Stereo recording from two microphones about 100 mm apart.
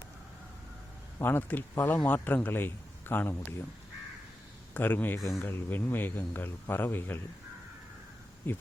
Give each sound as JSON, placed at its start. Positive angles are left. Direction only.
{"t": 1.2, "sound": "speech", "side_deg": 20}
{"t": 4.7, "sound": "speech", "side_deg": 20}
{"t": 8.4, "sound": "speech", "side_deg": 20}